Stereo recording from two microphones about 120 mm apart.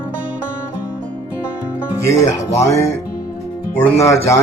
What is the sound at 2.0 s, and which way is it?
Speech, 25° left (ahead or behind).